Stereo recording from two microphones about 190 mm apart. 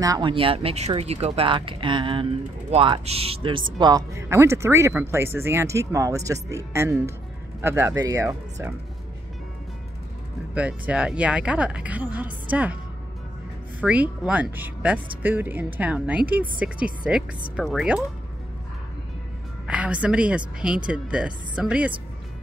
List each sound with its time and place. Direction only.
0.0 s speech: 20° right (ahead or behind)
10.5 s speech: 5° right (ahead or behind)
13.7 s speech: 10° right (ahead or behind)
19.7 s speech: 5° right (ahead or behind)